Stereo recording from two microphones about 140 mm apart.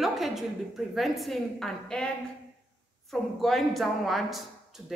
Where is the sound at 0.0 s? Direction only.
Centre (ahead or behind).